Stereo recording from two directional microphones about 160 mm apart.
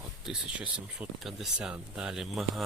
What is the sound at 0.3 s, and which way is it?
Speech, 5° right (ahead or behind).